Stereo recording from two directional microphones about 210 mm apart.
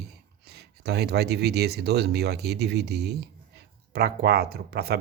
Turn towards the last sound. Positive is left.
turn(degrees=-50)  # may be behind; listen again after turning